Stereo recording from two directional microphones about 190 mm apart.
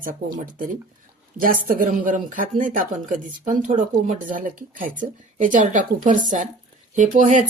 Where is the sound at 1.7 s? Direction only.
45° right (ahead or behind).